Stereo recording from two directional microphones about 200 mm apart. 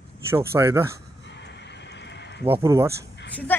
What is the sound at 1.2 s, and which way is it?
Neigh, 60° left (ahead or behind).